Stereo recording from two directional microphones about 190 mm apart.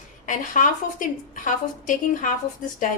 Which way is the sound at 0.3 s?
45° left (ahead or behind).